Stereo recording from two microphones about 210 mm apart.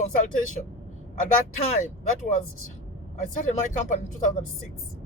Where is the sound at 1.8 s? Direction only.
40° left (ahead or behind).